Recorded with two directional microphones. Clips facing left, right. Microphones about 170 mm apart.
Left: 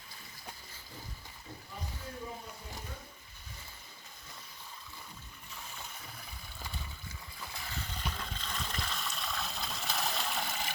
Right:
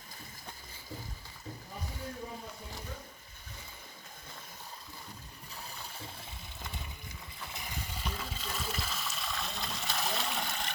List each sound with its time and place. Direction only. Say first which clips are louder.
6.0 s water: right 3 dB; 25° right (ahead or behind); by 10.7 s centre (ahead or behind)